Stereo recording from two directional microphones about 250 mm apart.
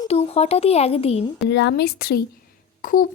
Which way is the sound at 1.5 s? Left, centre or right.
Left.